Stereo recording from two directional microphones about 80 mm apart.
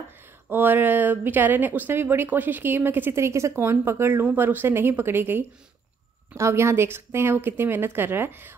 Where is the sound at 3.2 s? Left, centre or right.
Right.